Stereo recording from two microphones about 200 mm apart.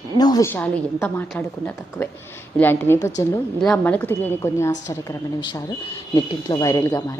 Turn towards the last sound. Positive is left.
turn(degrees=15)  # may be behind; listen again after turning